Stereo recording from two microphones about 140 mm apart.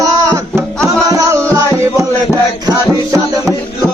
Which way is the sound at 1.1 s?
25° right (ahead or behind).